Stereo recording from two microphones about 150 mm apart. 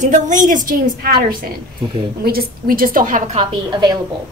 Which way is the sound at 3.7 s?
25° right (ahead or behind).